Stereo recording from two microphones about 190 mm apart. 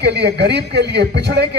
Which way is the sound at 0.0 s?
60° right (ahead or behind).